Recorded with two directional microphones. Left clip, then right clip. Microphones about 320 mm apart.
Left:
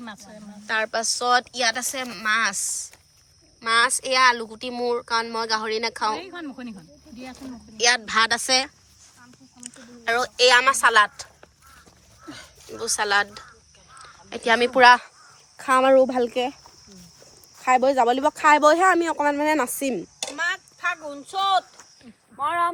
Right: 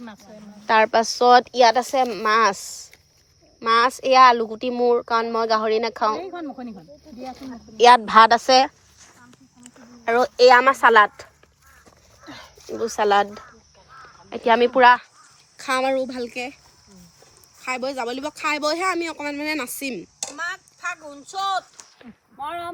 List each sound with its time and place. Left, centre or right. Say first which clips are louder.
0.0 s speech: left 2 dB; left
0.7 s speech: right 7 dB; centre
7.8 s a woman's voice: right 8 dB; centre
12.2 s a sound: right 1 dB; right
12.7 s speech: right 3 dB; centre
15.8 s speech: left 9 dB; centre
17.6 s speech: left 8 dB; centre
20.1 s a sound: left 3 dB; left
22.4 s speech: left 7 dB; centre